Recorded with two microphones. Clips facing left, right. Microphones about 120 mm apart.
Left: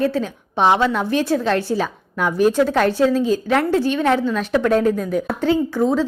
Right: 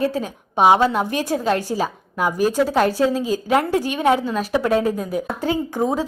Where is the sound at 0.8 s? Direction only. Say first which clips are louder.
Right 1 dB; 40° right (ahead or behind).